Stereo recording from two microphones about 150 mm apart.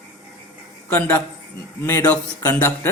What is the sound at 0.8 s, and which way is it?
Speech, 15° left (ahead or behind).